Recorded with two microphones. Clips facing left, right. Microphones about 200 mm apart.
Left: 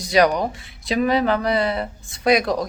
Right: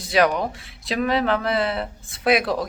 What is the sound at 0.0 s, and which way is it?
Speech, centre (ahead or behind).